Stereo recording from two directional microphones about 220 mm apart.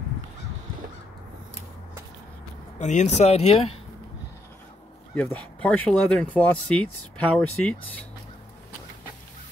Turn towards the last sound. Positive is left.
turn(degrees=5)  # may be behind; listen again after turning